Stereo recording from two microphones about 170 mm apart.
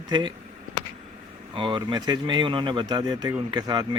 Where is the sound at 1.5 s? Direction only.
30° right (ahead or behind).